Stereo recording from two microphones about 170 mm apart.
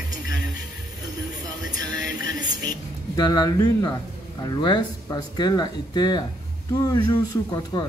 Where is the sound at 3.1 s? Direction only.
25° left (ahead or behind).